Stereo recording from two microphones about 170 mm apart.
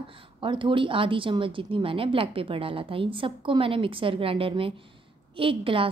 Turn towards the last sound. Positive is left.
turn(degrees=-30)  # may be behind; listen again after turning